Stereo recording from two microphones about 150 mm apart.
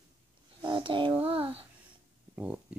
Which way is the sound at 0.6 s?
35° right (ahead or behind).